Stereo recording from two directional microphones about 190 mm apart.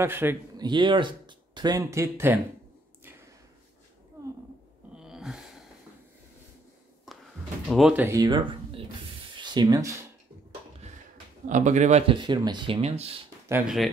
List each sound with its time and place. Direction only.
0.0 s speech: 10° right (ahead or behind)
0.7 s speech: 25° right (ahead or behind)
4.9 s wail: 5° right (ahead or behind)
7.1 s a sound: centre (ahead or behind)
7.6 s speech: centre (ahead or behind); by 9.9 s 20° right (ahead or behind)
11.4 s speech: 40° right (ahead or behind)
13.5 s speech: 5° right (ahead or behind)